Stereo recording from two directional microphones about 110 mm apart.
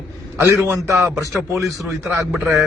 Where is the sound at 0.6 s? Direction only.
25° right (ahead or behind).